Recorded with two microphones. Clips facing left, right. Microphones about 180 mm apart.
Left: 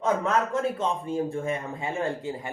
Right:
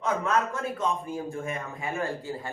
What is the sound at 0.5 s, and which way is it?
A man's voice, 30° left (ahead or behind).